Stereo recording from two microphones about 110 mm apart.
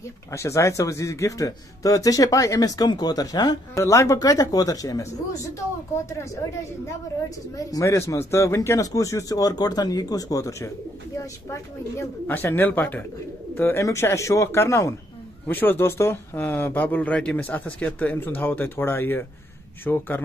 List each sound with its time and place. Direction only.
0.3 s speech: 25° left (ahead or behind)
7.5 s speech: 30° left (ahead or behind)
12.3 s a man's voice: 20° left (ahead or behind)